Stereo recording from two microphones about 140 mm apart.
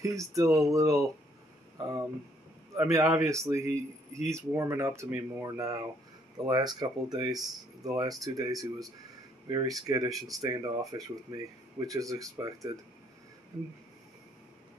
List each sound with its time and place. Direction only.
0.0 s a man's voice: 20° right (ahead or behind)